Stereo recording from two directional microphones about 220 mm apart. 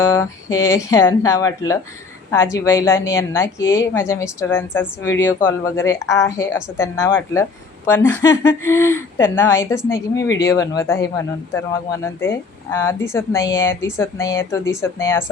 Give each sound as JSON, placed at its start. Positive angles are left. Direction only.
{"t": 0.0, "sound": "speech", "side_deg": 10}